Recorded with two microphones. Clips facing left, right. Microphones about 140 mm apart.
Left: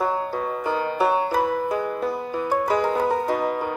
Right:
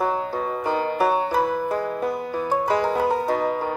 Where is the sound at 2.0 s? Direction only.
15° right (ahead or behind).